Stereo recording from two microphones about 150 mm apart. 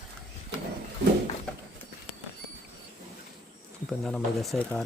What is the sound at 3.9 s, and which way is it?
Speech, centre (ahead or behind).